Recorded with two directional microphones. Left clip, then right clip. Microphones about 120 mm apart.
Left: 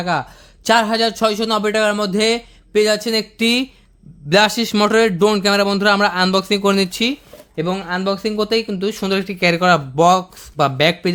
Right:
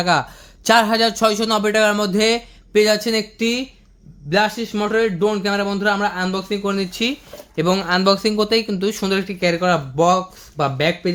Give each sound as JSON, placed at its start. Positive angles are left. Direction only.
{"t": 0.0, "sound": "speech", "side_deg": 10}
{"t": 3.3, "sound": "speech", "side_deg": 55}
{"t": 4.3, "sound": "speech", "side_deg": 90}
{"t": 6.9, "sound": "speech", "side_deg": 40}
{"t": 7.7, "sound": "speech", "side_deg": -5}
{"t": 8.3, "sound": "speech", "side_deg": 15}
{"t": 9.2, "sound": "speech", "side_deg": 55}